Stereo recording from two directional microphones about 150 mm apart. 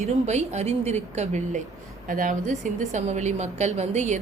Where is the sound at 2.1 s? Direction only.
60° right (ahead or behind).